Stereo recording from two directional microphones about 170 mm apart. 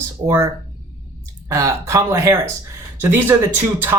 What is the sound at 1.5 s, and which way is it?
Speech, 15° right (ahead or behind).